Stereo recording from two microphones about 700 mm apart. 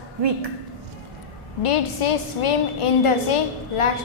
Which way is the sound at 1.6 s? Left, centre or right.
Left.